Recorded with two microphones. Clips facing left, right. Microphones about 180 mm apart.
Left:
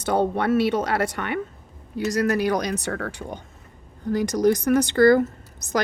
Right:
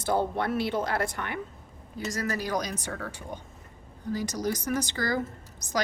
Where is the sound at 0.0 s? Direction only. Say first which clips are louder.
Left 5 dB; 75° left (ahead or behind).